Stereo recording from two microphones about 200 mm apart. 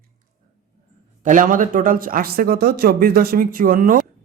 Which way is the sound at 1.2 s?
40° right (ahead or behind).